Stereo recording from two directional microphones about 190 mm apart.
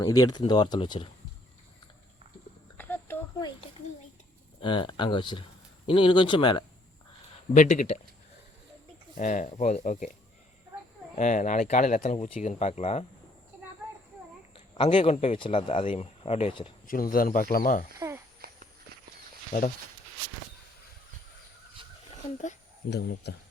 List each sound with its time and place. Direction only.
0.0 s speech: 20° left (ahead or behind)
2.7 s a sound: 10° left (ahead or behind)
3.3 s a sound: 20° left (ahead or behind)
4.6 s speech: 25° left (ahead or behind)
7.5 s speech: 40° left (ahead or behind)
9.1 s speech: 40° left (ahead or behind)
11.1 s speech: 40° left (ahead or behind)
14.5 s speech: 25° left (ahead or behind)
16.8 s speech: 45° left (ahead or behind)
21.8 s a sound: 25° right (ahead or behind)
22.9 s speech: 60° left (ahead or behind)